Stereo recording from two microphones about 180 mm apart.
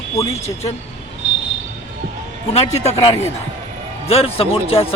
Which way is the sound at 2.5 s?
35° left (ahead or behind).